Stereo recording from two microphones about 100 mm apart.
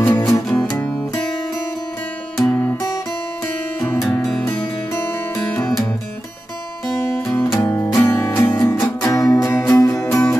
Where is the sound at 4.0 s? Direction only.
Centre (ahead or behind).